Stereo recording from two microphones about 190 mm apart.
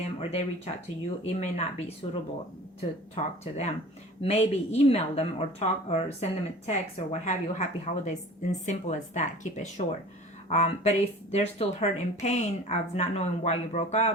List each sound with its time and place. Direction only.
0.2 s a woman's voice: 30° left (ahead or behind)